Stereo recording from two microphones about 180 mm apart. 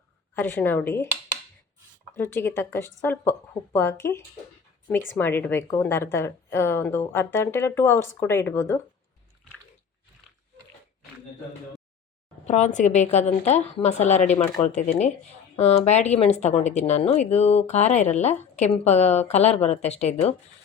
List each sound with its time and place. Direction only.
0.3 s a woman's voice: 10° left (ahead or behind)
2.1 s a woman's voice: 10° left (ahead or behind)
12.5 s speech: 40° left (ahead or behind)